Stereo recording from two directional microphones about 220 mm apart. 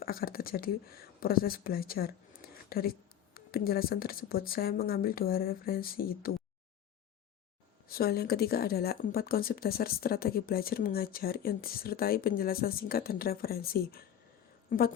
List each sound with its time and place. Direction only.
0.0 s speech: 40° left (ahead or behind)
7.9 s a woman's voice: 45° left (ahead or behind)